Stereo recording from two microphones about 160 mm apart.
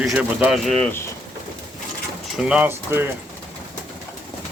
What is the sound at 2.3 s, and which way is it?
Speech, 5° right (ahead or behind).